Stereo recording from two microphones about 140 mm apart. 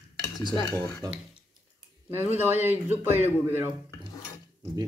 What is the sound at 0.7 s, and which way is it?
Speech, 20° left (ahead or behind).